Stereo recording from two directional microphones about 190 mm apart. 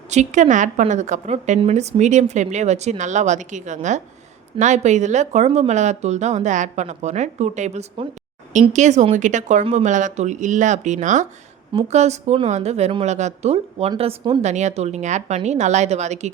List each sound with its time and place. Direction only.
0.1 s a woman's voice: 40° right (ahead or behind)